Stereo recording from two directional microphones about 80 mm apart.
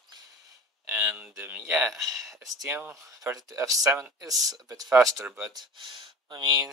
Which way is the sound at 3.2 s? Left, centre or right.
Right.